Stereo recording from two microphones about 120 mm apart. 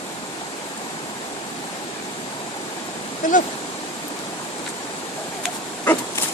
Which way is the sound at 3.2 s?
90° left.